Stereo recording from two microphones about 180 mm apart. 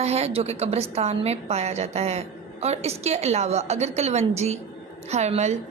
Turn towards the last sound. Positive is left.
turn(degrees=-40)  # may be behind; listen again after turning